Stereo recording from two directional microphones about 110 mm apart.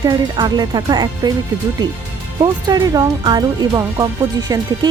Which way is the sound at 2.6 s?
35° right (ahead or behind).